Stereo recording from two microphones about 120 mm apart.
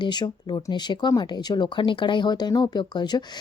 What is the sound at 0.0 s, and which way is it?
Speech, 40° left (ahead or behind).